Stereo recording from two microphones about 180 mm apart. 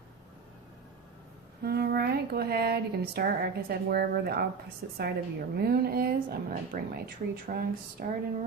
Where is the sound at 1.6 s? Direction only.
60° right (ahead or behind).